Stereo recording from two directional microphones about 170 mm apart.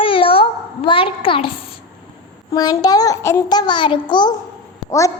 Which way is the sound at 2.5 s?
20° left (ahead or behind).